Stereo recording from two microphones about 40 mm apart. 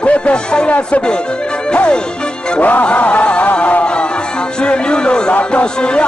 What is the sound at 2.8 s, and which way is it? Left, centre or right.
Music, left.